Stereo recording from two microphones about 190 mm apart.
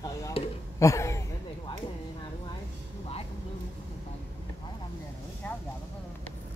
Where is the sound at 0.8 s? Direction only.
15° left (ahead or behind).